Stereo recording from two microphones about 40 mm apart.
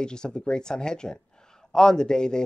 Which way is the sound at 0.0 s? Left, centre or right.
Centre.